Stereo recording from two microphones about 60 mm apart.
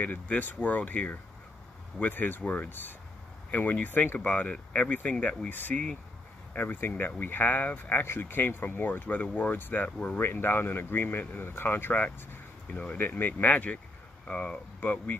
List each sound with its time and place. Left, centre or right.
0.0 s speech: left
5.5 s speech: left
8.0 s speech: left
9.5 s speech: left
12.6 s speech: left
13.0 s speech: left
14.3 s speech: left